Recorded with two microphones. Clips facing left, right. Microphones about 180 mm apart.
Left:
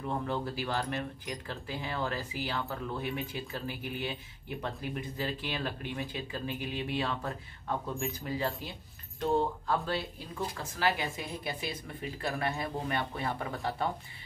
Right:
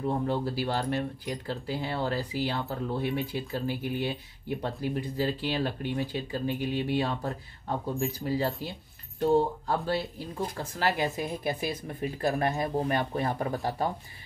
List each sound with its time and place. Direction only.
0.0 s speech: 35° right (ahead or behind)